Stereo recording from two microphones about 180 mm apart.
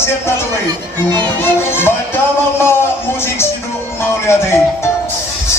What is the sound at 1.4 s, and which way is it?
Speech, 15° left (ahead or behind).